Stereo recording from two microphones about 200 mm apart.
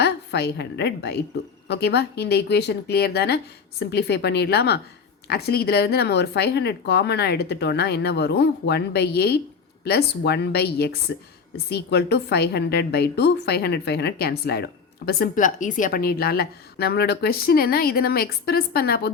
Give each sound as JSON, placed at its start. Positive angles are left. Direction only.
{"t": 0.0, "sound": "a woman's voice", "side_deg": 55}